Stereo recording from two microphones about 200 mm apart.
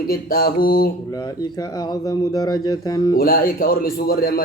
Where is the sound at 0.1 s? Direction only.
45° left (ahead or behind).